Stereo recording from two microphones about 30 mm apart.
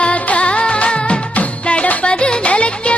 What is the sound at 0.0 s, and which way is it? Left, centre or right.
Music, left.